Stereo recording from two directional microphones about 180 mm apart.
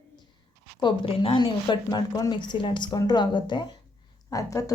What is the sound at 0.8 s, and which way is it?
Speech, 30° left (ahead or behind).